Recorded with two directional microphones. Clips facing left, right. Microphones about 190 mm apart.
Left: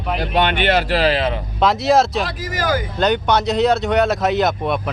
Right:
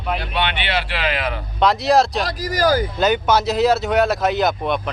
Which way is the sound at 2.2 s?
40° right (ahead or behind).